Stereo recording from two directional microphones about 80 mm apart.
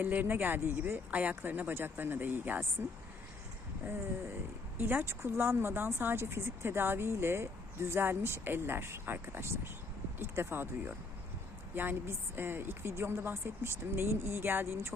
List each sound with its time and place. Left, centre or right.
0.0 s speech: right
4.8 s speech: right